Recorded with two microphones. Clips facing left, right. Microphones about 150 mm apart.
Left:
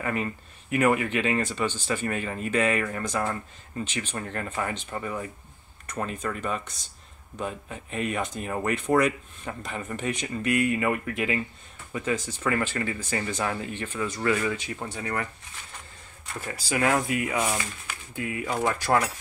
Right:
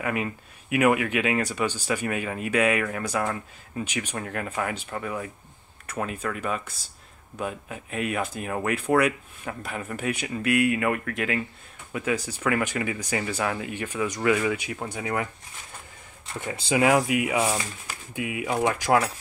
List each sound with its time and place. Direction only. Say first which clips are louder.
0.0 s speech: right 1 dB; 5° right (ahead or behind)
16.3 s speech: right 4 dB; 20° right (ahead or behind)